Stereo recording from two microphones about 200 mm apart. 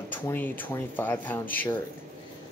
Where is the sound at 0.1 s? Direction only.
10° left (ahead or behind).